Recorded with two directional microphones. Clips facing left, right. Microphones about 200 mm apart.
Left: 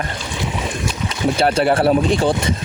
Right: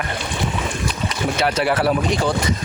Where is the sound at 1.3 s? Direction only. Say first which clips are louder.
Left 4 dB; 30° left (ahead or behind).